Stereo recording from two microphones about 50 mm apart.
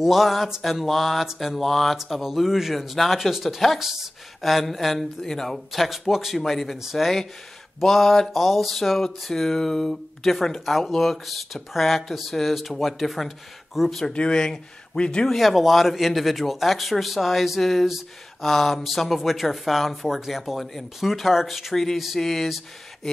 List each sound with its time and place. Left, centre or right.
0.0 s speech: centre
14.0 s speech: centre
15.2 s speech: centre